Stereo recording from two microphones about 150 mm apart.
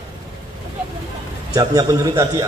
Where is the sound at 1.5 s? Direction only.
25° right (ahead or behind).